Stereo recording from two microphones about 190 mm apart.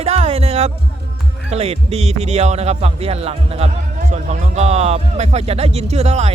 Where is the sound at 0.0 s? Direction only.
35° right (ahead or behind).